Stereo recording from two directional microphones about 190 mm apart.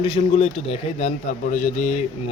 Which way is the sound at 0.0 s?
30° left (ahead or behind).